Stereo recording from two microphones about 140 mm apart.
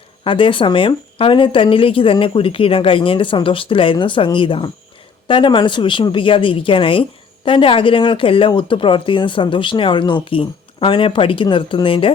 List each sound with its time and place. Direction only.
0.3 s speech: 35° left (ahead or behind)